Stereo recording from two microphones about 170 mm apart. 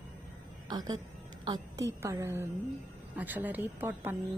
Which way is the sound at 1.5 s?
20° right (ahead or behind).